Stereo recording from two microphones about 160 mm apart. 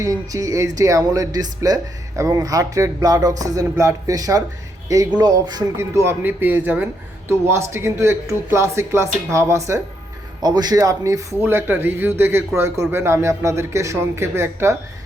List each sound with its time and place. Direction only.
0.0 s speech: 20° right (ahead or behind)